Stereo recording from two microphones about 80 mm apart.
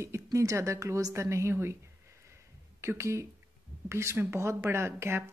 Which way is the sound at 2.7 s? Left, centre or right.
Right.